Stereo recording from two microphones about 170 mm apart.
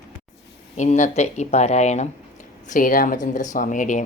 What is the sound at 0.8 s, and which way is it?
Speech, 45° left (ahead or behind).